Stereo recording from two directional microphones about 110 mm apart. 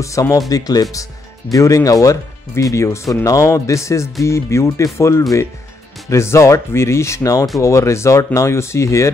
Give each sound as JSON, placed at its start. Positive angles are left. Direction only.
{"t": 0.0, "sound": "speech", "side_deg": 30}